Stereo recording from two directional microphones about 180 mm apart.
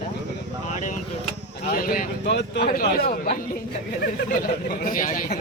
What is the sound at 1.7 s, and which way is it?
Speech, 55° left (ahead or behind).